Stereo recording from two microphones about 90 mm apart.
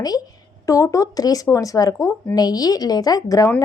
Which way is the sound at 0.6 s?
35° left (ahead or behind).